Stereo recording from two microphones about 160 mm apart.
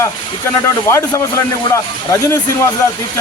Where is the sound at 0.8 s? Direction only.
15° left (ahead or behind).